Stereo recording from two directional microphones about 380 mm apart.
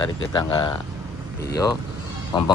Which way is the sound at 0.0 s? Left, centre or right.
Centre.